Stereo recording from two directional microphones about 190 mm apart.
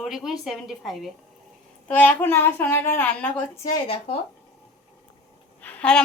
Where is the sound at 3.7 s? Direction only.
30° left (ahead or behind).